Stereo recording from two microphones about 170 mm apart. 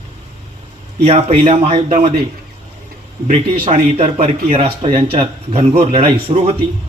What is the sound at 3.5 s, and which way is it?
Speech, 35° right (ahead or behind).